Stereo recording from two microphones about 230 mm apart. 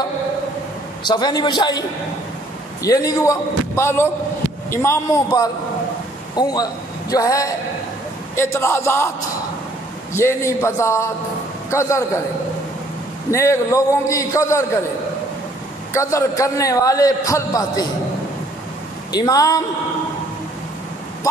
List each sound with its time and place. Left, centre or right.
1.0 s a man's voice: centre
10.1 s a man's voice: centre
13.3 s a man's voice: centre
15.9 s a man's voice: centre
19.1 s a man's voice: centre